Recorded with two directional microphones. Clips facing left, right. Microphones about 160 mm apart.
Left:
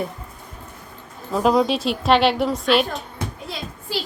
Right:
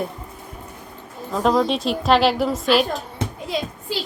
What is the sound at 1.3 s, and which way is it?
A child's voice, 5° left (ahead or behind).